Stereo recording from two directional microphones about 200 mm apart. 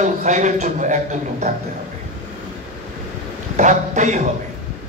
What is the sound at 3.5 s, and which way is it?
Speech, 35° right (ahead or behind).